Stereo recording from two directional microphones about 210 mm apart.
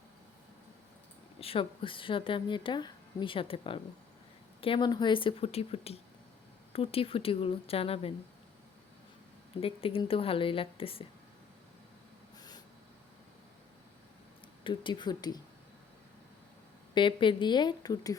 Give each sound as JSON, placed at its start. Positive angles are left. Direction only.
{"t": 1.4, "sound": "speech", "side_deg": 25}
{"t": 9.6, "sound": "speech", "side_deg": 25}
{"t": 12.4, "sound": "a sound", "side_deg": 20}
{"t": 14.6, "sound": "speech", "side_deg": 20}
{"t": 16.9, "sound": "speech", "side_deg": 25}